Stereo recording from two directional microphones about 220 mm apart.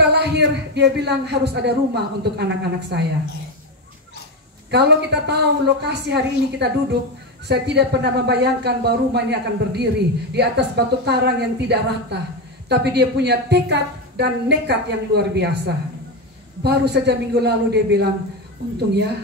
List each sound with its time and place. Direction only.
0.0 s a woman's voice: 50° right (ahead or behind)
4.6 s a woman's voice: 50° right (ahead or behind)